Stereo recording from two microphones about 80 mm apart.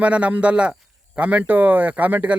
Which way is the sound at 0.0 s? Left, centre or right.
Centre.